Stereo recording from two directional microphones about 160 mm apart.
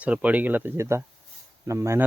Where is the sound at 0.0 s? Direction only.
10° right (ahead or behind).